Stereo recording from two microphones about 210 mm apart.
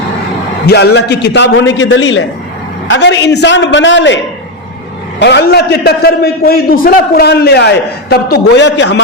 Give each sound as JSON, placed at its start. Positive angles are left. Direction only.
{"t": 0.7, "sound": "a man's voice", "side_deg": 50}
{"t": 5.2, "sound": "a man's voice", "side_deg": 55}